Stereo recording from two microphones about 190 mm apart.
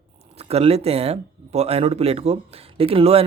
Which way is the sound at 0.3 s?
30° right (ahead or behind).